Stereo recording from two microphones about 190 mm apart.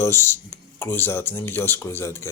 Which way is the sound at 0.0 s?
15° left (ahead or behind).